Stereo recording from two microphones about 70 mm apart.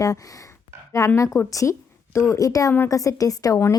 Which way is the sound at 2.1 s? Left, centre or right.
Left.